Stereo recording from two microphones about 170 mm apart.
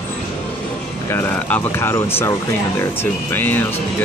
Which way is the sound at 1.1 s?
10° left (ahead or behind).